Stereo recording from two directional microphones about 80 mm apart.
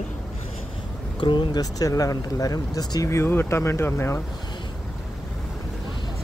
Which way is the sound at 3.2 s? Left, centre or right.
Left.